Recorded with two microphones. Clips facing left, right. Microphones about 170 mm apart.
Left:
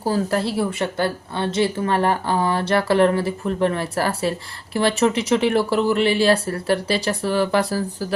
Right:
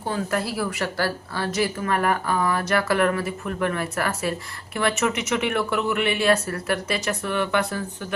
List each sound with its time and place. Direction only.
0.0 s speech: 35° left (ahead or behind)